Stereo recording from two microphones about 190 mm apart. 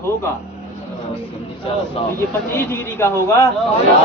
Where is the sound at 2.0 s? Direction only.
30° left (ahead or behind).